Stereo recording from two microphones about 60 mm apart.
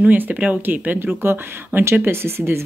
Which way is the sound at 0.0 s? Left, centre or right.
Right.